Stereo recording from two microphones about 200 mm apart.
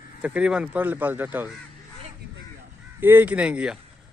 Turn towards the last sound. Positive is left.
turn(degrees=-5)  # may be behind; listen again after turning